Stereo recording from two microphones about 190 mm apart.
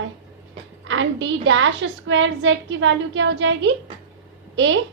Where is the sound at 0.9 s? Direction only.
80° right.